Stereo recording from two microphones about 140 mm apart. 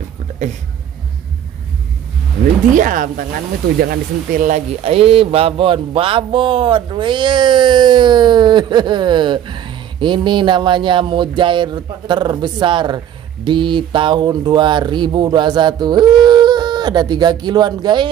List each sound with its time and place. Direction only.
2.7 s speech: 70° right (ahead or behind)
3.9 s speech: 85° right; by 18.0 s 30° right (ahead or behind)